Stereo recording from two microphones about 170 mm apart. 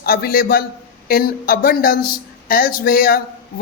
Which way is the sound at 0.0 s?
60° left (ahead or behind).